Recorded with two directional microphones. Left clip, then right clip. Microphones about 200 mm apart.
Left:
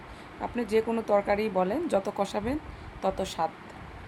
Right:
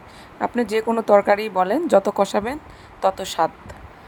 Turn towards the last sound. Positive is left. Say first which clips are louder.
# right 9 dB
turn(degrees=-30)  # may be behind; listen again after turning